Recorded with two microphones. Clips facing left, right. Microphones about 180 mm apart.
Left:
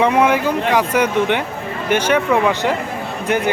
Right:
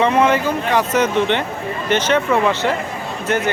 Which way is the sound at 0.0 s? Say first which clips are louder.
Left 1 dB; 10° left (ahead or behind).